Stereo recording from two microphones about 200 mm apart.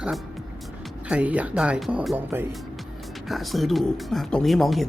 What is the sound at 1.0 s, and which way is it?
Speech, 5° right (ahead or behind).